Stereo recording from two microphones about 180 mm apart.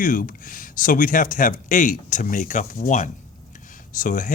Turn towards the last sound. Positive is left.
turn(degrees=45)  # may be behind; listen again after turning